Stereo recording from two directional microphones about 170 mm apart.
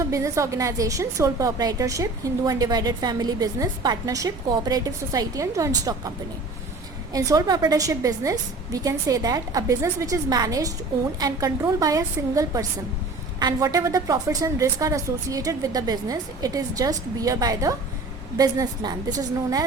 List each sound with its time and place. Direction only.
0.0 s a woman's voice: 20° right (ahead or behind)